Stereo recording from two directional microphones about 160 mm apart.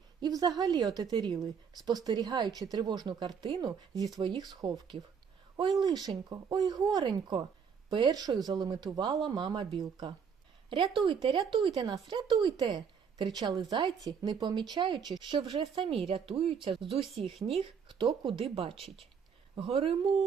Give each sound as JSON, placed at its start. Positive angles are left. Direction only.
{"t": 0.2, "sound": "speech", "side_deg": -25}